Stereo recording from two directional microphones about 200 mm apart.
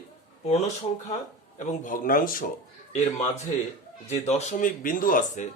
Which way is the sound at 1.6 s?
35° left (ahead or behind).